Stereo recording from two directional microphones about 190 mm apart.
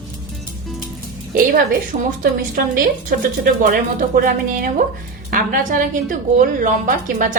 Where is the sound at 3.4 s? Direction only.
50° right (ahead or behind).